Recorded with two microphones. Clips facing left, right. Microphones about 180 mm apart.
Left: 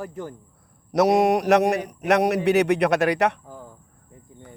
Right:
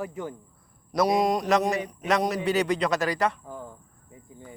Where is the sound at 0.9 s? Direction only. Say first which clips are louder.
Left 5 dB; 70° left (ahead or behind).